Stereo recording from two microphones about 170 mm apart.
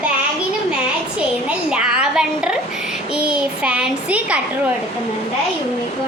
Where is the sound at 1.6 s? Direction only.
5° right (ahead or behind).